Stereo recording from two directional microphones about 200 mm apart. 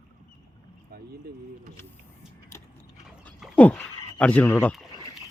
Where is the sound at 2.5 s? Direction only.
15° left (ahead or behind).